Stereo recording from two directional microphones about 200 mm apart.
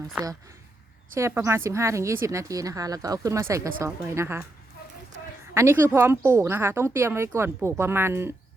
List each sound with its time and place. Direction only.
1.1 s speech: 15° right (ahead or behind)
5.5 s speech: 10° right (ahead or behind)